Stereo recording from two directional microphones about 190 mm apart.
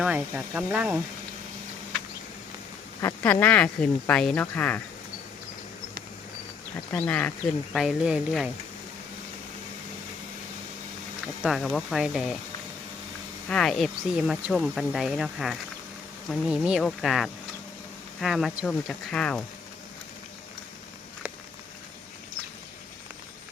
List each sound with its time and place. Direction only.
0.0 s speech: 5° right (ahead or behind)
3.0 s speech: 15° left (ahead or behind)
6.9 s speech: 10° left (ahead or behind)
11.4 s speech: centre (ahead or behind)
13.5 s speech: centre (ahead or behind)